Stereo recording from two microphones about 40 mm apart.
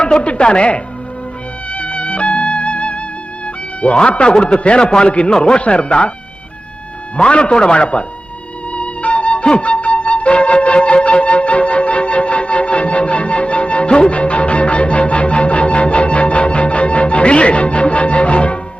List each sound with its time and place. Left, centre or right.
0.0 s a man's voice: left
1.7 s music: left
3.4 s a man's voice: left
7.2 s a man's voice: left
8.7 s music: left